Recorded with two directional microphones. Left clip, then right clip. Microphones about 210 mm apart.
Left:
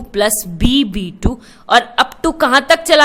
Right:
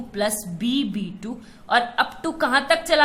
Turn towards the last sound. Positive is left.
turn(degrees=50)  # may be behind; listen again after turning